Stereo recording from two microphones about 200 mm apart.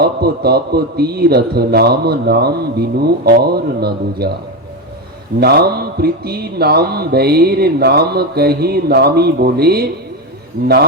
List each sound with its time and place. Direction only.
0.0 s speech: 50° right (ahead or behind)
5.4 s speech: 50° right (ahead or behind)